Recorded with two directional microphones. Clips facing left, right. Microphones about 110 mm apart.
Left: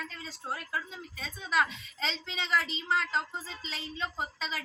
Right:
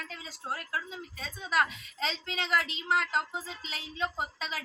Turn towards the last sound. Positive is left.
turn(degrees=-5)  # may be behind; listen again after turning